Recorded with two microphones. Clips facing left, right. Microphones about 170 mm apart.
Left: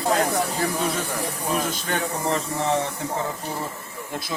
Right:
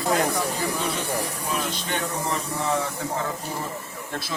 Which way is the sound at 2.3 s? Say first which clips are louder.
Left 5 dB; 35° left (ahead or behind).